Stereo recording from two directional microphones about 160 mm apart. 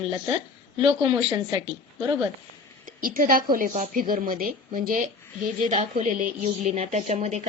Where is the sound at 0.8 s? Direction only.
30° right (ahead or behind).